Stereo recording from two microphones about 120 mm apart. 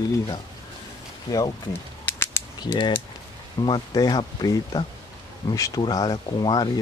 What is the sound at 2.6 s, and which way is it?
Speech, 40° left (ahead or behind).